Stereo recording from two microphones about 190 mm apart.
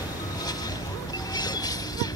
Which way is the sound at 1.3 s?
20° left (ahead or behind).